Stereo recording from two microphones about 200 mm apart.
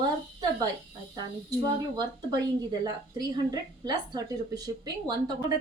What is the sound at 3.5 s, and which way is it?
Speech, 20° right (ahead or behind).